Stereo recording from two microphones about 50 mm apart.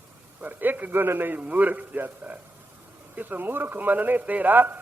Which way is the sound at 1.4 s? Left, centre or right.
Right.